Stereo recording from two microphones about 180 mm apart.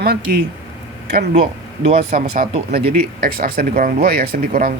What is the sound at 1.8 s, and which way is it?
Speech, 40° right (ahead or behind).